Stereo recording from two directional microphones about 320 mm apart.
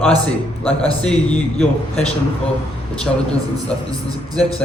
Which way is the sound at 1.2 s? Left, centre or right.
Centre.